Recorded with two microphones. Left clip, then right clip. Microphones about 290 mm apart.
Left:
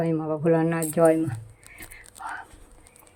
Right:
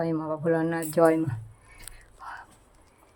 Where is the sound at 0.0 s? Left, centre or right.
Centre.